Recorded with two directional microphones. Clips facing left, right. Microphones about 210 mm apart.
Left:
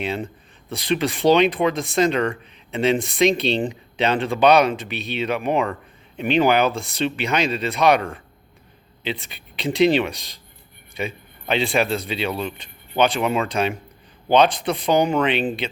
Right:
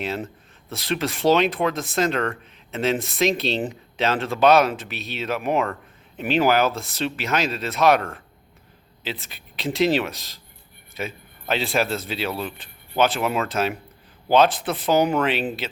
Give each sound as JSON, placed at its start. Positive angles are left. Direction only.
{"t": 0.0, "sound": "speech", "side_deg": 0}